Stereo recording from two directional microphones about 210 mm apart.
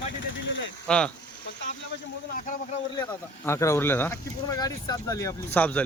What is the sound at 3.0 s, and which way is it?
Speech, 10° left (ahead or behind).